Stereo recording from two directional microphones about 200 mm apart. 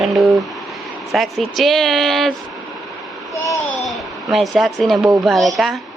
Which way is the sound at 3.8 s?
Centre (ahead or behind).